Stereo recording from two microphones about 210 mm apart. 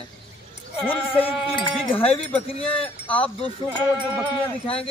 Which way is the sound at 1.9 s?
25° left (ahead or behind).